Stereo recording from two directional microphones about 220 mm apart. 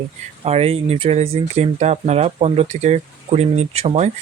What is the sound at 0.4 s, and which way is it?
Speech, 30° right (ahead or behind).